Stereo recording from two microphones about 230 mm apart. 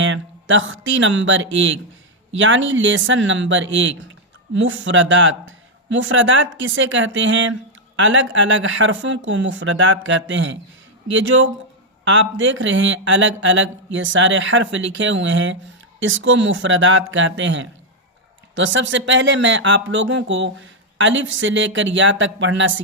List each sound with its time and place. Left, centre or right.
0.0 s a man's voice: right